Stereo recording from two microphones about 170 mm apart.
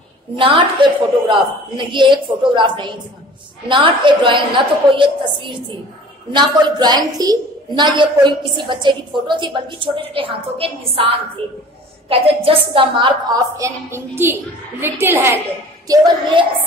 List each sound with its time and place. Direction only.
0.4 s a woman's voice: 30° right (ahead or behind); by 15.3 s 15° right (ahead or behind)
15.9 s a woman's voice: 30° right (ahead or behind)